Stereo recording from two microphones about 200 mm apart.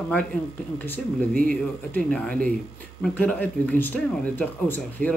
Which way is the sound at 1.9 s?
5° left (ahead or behind).